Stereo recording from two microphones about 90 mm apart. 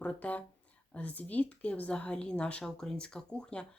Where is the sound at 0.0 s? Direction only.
15° left (ahead or behind).